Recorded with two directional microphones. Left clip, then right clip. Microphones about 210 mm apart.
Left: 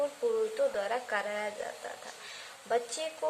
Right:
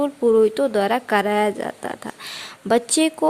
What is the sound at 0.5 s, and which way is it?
A woman's voice, 50° right (ahead or behind).